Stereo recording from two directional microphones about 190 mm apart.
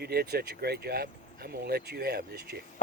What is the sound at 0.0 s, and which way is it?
Speech, 55° right (ahead or behind).